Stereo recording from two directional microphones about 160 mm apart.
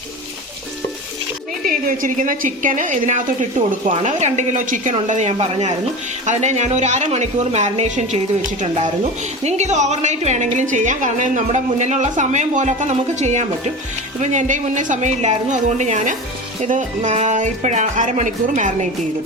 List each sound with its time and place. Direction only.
1.6 s a woman's voice: 60° right (ahead or behind)